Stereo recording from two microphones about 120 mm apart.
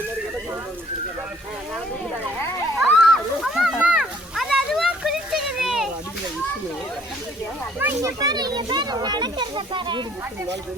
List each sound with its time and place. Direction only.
2.7 s slosh: 5° right (ahead or behind)
4.4 s a sound: centre (ahead or behind)
7.8 s a child's voice: 15° right (ahead or behind)
8.2 s a child's voice: 35° right (ahead or behind)